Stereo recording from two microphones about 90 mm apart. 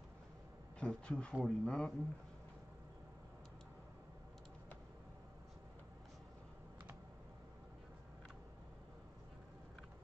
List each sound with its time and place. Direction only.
0.7 s speech: 10° left (ahead or behind)